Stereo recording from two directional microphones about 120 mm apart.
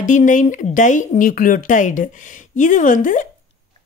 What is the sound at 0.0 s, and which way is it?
Speech, 90° left.